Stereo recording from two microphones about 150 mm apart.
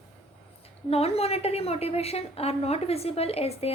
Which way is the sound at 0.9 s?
40° left (ahead or behind).